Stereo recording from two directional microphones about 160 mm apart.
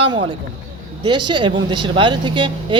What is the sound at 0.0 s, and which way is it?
A woman's voice, 35° right (ahead or behind).